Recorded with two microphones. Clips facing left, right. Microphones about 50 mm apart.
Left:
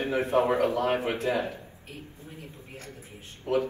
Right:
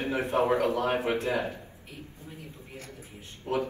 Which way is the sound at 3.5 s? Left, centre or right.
Left.